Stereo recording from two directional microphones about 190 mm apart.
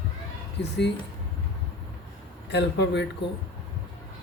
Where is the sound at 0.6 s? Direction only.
60° left (ahead or behind).